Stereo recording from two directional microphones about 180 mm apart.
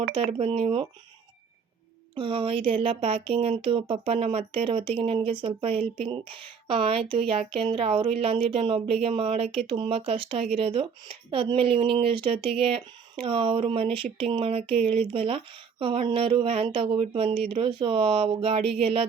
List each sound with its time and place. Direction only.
0.3 s speech: 30° right (ahead or behind)
2.1 s speech: 30° right (ahead or behind)